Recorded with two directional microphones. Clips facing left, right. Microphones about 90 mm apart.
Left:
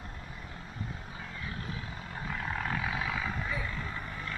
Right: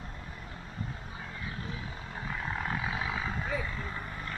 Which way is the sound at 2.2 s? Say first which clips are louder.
Even; 10° right (ahead or behind).